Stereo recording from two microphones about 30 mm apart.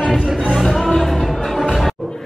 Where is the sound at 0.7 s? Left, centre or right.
Centre.